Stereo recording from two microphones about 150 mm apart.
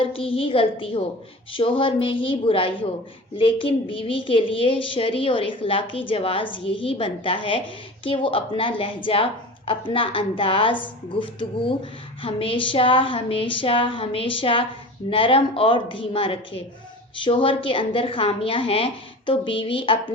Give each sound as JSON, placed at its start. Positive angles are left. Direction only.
{"t": 0.0, "sound": "a woman's voice", "side_deg": 35}